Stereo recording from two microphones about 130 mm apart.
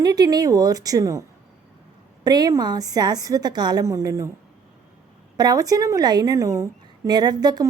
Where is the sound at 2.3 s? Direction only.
30° right (ahead or behind).